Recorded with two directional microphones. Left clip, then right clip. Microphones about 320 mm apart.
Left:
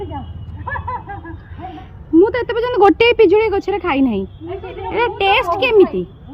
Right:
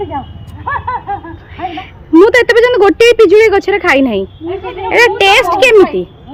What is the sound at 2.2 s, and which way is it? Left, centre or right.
A woman's voice, centre.